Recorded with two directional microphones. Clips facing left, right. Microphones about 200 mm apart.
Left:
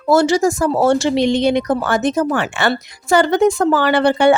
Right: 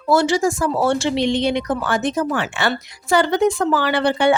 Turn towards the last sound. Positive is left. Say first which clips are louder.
# left 4 dB
turn(degrees=45)  # may be behind; listen again after turning